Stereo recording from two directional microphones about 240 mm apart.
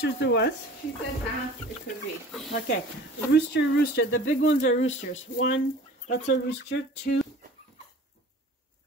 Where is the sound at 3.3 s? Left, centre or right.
Left.